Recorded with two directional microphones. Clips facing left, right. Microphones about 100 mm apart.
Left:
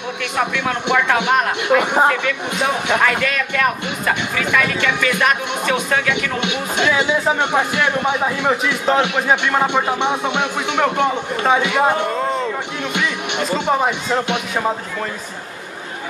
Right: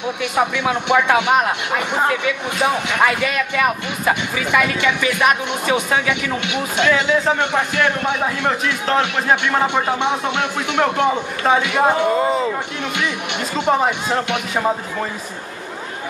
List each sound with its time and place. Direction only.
0.2 s speech: 10° right (ahead or behind)
6.4 s a man's voice: 15° left (ahead or behind); by 12.5 s 5° right (ahead or behind)
13.7 s a man's voice: centre (ahead or behind)